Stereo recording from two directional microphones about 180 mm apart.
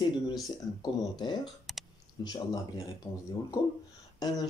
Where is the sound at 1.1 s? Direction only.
25° left (ahead or behind).